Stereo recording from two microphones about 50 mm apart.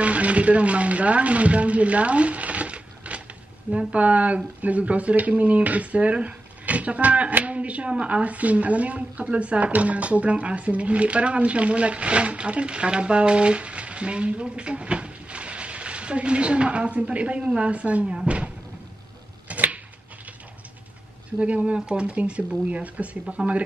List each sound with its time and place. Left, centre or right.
0.0 s a woman's voice: right
19.4 s a sound: right
21.4 s a woman's voice: right